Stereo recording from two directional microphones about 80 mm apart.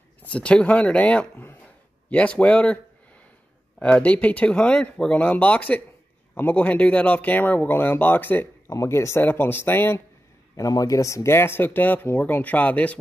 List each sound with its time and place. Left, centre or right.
0.2 s speech: centre
3.8 s speech: centre
8.6 s speech: left
10.5 s speech: left; by 12.9 s centre